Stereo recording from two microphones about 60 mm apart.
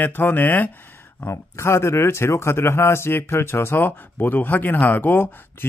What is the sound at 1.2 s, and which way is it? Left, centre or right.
Speech, left.